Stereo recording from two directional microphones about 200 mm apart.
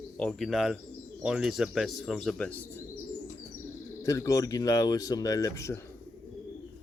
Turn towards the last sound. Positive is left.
turn(degrees=15)  # may be behind; listen again after turning